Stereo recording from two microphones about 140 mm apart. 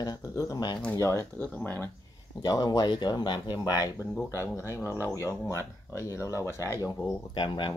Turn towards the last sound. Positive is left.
turn(degrees=35)  # may be behind; listen again after turning